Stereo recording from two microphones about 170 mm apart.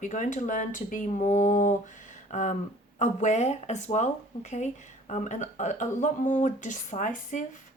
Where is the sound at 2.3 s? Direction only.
45° left (ahead or behind).